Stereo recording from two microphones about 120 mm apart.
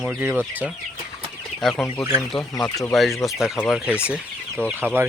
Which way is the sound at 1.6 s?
5° left (ahead or behind).